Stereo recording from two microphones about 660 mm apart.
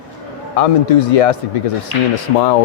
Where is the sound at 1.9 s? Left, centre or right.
Right.